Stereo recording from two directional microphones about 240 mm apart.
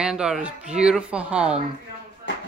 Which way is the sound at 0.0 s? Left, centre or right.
Centre.